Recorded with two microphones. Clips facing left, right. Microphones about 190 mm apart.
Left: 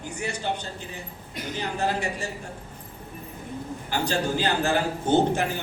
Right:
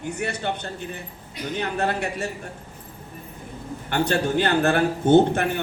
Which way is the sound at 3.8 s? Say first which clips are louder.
Right 4 dB; 60° right (ahead or behind).